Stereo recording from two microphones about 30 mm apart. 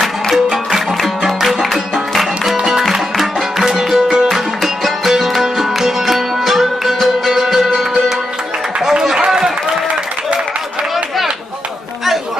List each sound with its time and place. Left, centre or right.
0.5 s music: centre
2.5 s music: centre
2.9 s music: centre
8.9 s a sound: right